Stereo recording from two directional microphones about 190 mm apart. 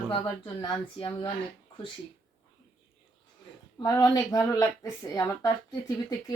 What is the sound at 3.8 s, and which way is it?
A woman's voice, 20° left (ahead or behind).